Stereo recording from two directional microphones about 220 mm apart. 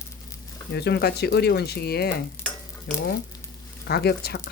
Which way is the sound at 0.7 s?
50° left (ahead or behind).